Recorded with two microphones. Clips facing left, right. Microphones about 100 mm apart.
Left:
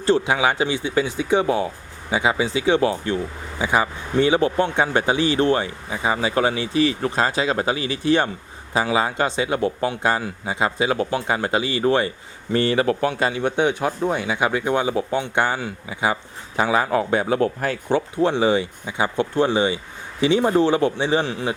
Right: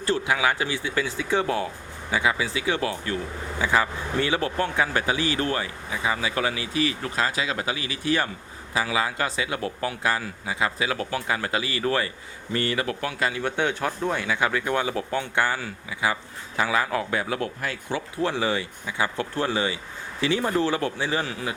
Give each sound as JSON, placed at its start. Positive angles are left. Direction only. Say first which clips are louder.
{"t": 0.0, "sound": "a man's voice", "louder": "left 5 dB", "side_deg": 25}
{"t": 18.2, "sound": "a man's voice", "louder": "left 5 dB", "side_deg": 20}